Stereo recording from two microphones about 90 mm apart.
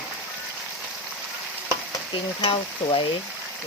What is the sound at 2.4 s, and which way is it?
Stir, 75° left (ahead or behind).